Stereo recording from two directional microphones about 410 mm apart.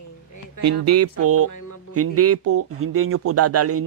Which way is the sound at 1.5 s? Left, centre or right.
Left.